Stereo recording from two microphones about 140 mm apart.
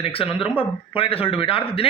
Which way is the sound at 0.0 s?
40° left (ahead or behind).